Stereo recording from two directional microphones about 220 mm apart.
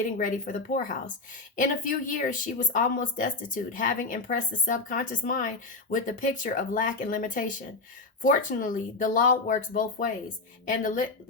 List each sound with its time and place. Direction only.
0.0 s speech: 35° left (ahead or behind)